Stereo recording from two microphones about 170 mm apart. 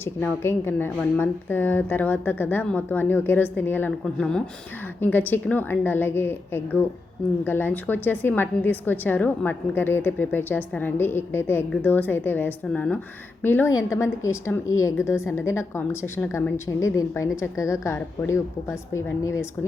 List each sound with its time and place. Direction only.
0.0 s a woman's voice: 15° left (ahead or behind)